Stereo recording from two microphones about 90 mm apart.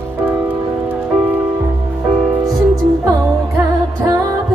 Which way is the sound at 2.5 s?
50° right (ahead or behind).